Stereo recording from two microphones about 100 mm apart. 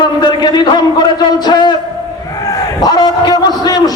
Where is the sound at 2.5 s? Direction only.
45° left (ahead or behind).